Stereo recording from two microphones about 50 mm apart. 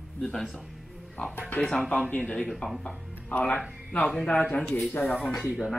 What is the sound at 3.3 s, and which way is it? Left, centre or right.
Speech, left.